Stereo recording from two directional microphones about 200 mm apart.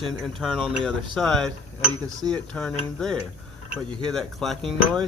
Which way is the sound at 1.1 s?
Centre (ahead or behind).